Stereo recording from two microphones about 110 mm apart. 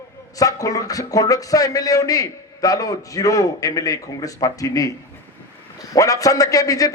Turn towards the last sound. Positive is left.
turn(degrees=35)  # may be behind; listen again after turning